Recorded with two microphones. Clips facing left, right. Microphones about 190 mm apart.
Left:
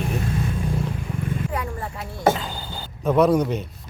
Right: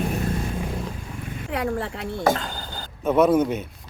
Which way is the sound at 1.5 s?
75° right (ahead or behind).